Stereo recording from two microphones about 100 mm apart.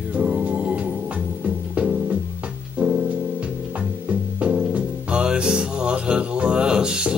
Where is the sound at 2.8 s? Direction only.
15° right (ahead or behind).